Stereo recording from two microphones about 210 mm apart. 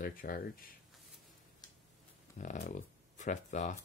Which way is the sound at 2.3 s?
35° left (ahead or behind).